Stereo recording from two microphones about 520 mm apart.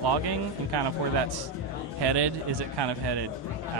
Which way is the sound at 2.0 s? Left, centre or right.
Right.